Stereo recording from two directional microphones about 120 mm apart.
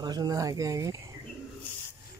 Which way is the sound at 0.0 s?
35° right (ahead or behind).